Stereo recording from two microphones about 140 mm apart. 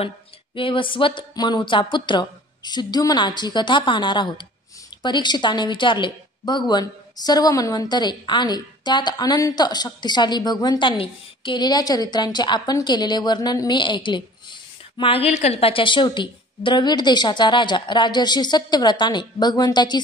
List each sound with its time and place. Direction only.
0.6 s a woman's voice: 35° left (ahead or behind)